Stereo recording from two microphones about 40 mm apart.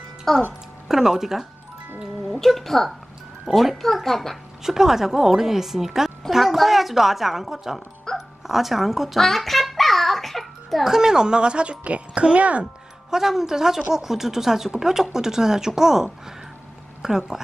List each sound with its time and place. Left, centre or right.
0.3 s a woman's voice: centre
0.8 s speech: centre
2.3 s a woman's voice: centre
4.6 s a woman's voice: centre
8.1 s music: centre
8.5 s babbling: centre
10.8 s speech: centre; by 12.6 s right
13.1 s speech: centre